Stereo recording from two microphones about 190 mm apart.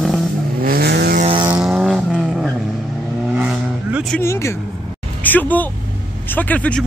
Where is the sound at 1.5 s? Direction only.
5° right (ahead or behind).